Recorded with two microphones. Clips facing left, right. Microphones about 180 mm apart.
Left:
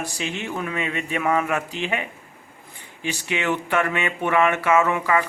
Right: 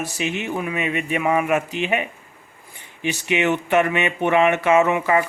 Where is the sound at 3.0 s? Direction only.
20° right (ahead or behind).